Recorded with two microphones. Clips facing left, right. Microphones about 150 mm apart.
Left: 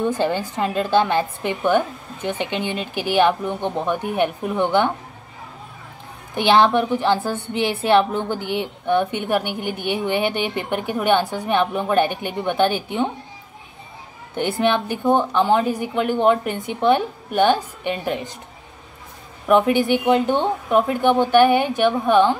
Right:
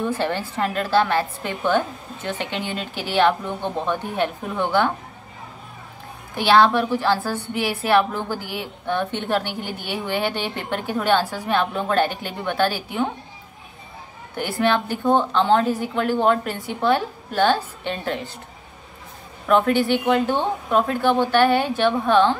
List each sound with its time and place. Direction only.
0.0 s a woman's voice: 15° left (ahead or behind)
6.3 s a woman's voice: 20° left (ahead or behind)
14.3 s a woman's voice: 20° left (ahead or behind)
19.4 s a woman's voice: 15° left (ahead or behind)